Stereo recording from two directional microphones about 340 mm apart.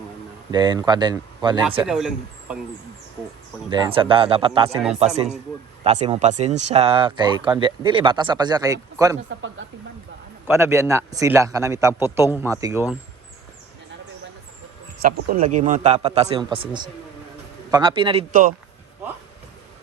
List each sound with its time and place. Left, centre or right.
0.5 s a man's voice: centre
3.7 s a man's voice: centre
5.8 s a man's voice: centre
9.6 s speech: right
10.4 s a man's voice: centre
15.0 s a man's voice: right